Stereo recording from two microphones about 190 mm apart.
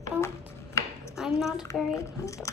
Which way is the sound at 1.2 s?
Centre (ahead or behind).